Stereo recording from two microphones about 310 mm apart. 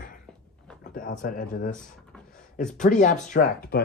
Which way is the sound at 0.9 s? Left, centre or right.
Left.